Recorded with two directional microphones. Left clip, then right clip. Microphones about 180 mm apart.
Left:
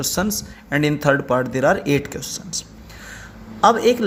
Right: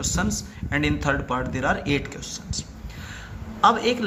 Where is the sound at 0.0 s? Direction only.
45° left (ahead or behind).